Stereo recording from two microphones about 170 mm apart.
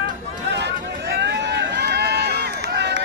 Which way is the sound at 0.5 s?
85° right.